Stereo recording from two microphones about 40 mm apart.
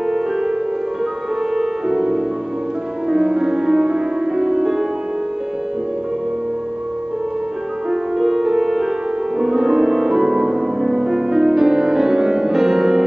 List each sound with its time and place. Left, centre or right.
1.5 s music: centre
7.9 s music: centre